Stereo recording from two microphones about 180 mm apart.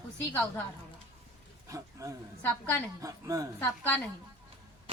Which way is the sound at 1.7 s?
15° right (ahead or behind).